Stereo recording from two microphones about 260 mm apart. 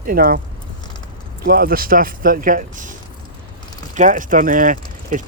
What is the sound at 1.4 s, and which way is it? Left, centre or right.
Speech, right.